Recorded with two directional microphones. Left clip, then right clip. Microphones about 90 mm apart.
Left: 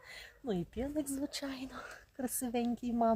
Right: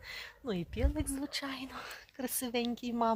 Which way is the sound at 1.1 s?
50° left (ahead or behind).